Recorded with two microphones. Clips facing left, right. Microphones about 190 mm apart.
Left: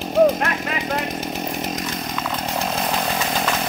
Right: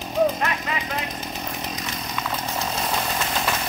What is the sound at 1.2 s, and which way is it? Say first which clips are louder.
Chainsaw: left 6 dB; 80° left.